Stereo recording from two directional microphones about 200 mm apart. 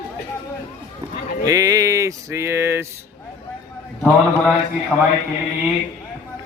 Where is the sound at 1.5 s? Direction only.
15° right (ahead or behind).